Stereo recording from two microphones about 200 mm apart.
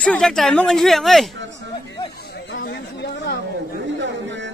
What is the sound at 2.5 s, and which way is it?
Speech, 60° left (ahead or behind).